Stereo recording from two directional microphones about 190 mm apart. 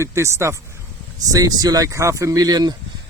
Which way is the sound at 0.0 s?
15° right (ahead or behind).